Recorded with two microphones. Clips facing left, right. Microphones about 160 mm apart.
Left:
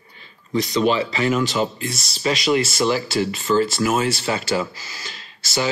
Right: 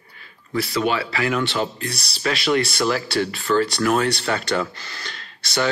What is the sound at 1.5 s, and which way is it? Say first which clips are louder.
Speech: left 2 dB; centre (ahead or behind).